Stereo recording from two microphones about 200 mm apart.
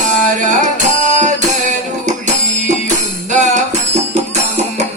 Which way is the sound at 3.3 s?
35° right (ahead or behind).